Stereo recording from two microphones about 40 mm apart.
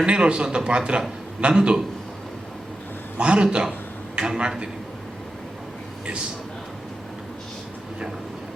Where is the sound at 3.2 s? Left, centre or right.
Right.